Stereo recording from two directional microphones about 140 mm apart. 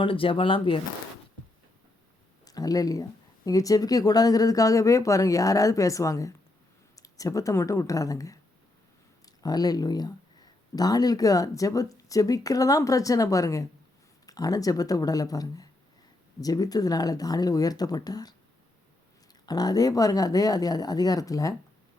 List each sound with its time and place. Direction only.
0.0 s speech: 40° left (ahead or behind)
2.4 s speech: 25° left (ahead or behind)
19.5 s speech: 30° left (ahead or behind)